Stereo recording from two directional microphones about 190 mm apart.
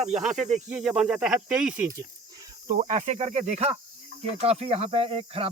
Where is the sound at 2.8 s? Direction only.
40° right (ahead or behind).